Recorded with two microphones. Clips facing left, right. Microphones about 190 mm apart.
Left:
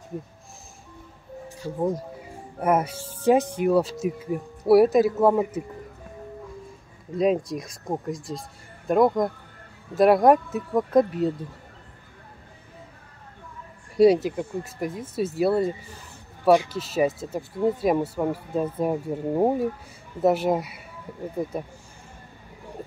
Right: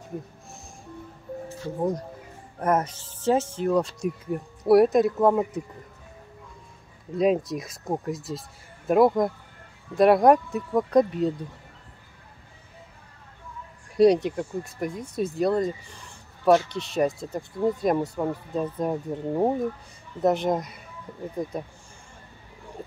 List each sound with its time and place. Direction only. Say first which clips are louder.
1.8 s speech: left 1 dB; centre (ahead or behind)
7.2 s speech: even; centre (ahead or behind)
13.8 s speech: left 1 dB; centre (ahead or behind)